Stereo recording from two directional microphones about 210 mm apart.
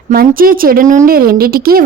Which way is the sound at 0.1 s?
45° right (ahead or behind).